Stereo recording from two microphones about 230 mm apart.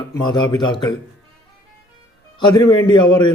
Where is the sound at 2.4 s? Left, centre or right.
Centre.